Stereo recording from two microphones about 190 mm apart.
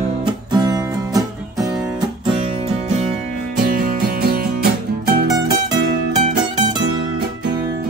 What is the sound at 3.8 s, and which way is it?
Music, 50° right (ahead or behind).